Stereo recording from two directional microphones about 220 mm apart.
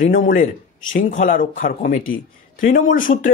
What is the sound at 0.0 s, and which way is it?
A man's voice, 35° left (ahead or behind).